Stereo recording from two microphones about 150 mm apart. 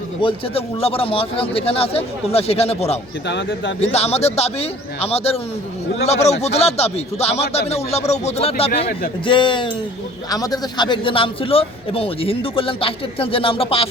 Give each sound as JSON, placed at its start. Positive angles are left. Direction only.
{"t": 0.2, "sound": "a man's voice", "side_deg": 35}